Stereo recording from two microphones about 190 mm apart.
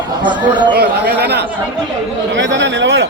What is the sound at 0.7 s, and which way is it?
Speech, 60° right (ahead or behind).